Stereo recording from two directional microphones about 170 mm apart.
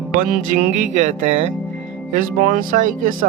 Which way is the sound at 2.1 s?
55° right (ahead or behind).